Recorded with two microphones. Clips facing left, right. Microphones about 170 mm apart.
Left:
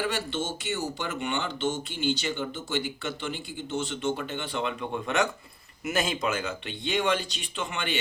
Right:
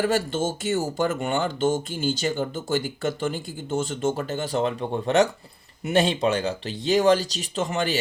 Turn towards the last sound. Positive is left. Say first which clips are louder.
# right 7 dB
turn(degrees=-40)  # may be behind; listen again after turning